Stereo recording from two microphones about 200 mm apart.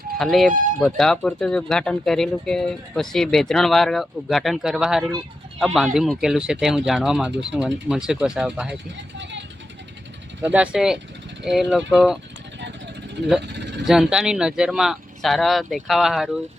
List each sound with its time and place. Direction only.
0.2 s speech: centre (ahead or behind)
10.4 s speech: 5° right (ahead or behind)
13.5 s a sound: 60° right (ahead or behind)
13.8 s speech: 5° right (ahead or behind)